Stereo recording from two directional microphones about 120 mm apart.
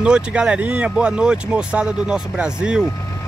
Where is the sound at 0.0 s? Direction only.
10° right (ahead or behind).